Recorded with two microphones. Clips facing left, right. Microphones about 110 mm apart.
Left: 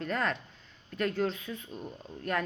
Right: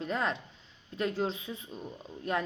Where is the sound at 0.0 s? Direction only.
20° right (ahead or behind).